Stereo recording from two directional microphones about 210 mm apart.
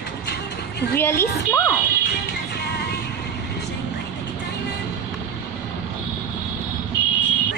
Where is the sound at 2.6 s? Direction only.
50° left (ahead or behind).